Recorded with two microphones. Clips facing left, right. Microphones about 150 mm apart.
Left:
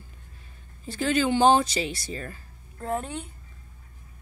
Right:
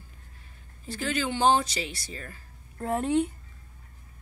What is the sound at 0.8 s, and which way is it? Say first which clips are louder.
Speech: left 6 dB; 25° left (ahead or behind).